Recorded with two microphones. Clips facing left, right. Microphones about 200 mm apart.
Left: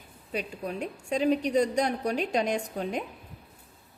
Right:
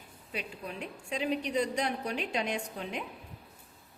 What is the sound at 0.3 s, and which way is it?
A woman's voice, 40° left (ahead or behind).